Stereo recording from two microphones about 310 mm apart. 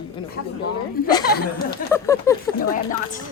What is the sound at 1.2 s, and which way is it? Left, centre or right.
Speech, left.